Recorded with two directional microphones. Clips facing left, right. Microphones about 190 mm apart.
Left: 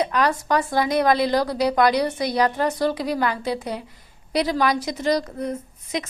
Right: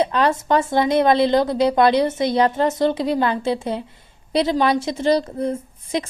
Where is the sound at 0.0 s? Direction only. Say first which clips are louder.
Right 3 dB; 25° right (ahead or behind).